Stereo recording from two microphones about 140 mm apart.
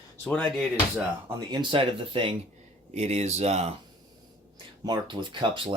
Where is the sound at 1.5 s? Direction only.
35° right (ahead or behind).